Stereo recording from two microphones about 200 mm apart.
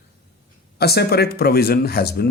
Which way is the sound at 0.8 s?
50° left (ahead or behind).